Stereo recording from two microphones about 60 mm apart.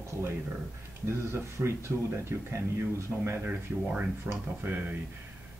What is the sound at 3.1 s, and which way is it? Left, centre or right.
Speech, centre.